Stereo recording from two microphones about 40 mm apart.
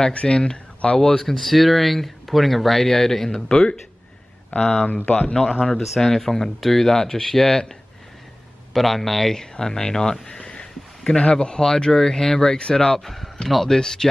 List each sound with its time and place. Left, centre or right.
0.1 s speech: left
5.0 s speech: left
5.3 s speech: centre
8.7 s speech: centre; by 12.9 s left
12.9 s speech: centre